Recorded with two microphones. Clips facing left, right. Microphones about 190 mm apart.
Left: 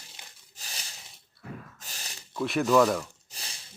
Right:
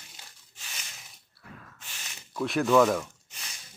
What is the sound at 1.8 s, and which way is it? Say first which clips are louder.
Gasp: left 2 dB; 40° left (ahead or behind).